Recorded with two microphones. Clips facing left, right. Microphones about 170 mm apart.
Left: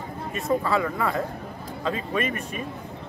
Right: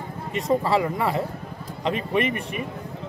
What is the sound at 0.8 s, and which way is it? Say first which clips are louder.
Speech: right 2 dB; 15° right (ahead or behind).